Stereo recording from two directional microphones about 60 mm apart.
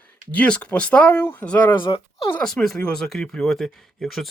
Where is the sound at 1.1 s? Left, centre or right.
Left.